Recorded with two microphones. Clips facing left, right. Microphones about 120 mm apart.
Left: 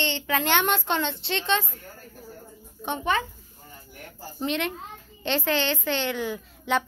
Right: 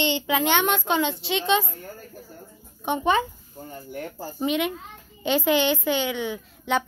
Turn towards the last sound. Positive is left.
turn(degrees=0)  # may be behind; listen again after turning